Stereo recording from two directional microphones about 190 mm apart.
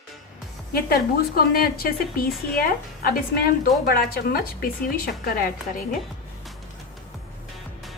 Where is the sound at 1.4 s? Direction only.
50° left (ahead or behind).